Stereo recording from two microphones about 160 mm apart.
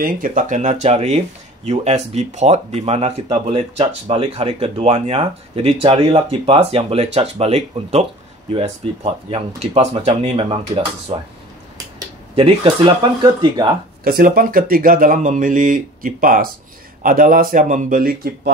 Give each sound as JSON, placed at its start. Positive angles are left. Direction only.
{"t": 0.0, "sound": "speech", "side_deg": -60}
{"t": 12.4, "sound": "speech", "side_deg": -30}
{"t": 14.0, "sound": "speech", "side_deg": -65}